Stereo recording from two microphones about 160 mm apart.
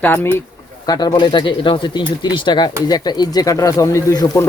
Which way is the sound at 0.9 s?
25° left (ahead or behind).